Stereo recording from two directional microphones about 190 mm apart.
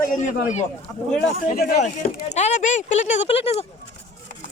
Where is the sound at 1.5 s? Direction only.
55° left (ahead or behind).